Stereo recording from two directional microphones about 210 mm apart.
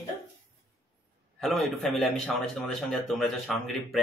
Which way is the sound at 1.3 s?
Centre (ahead or behind).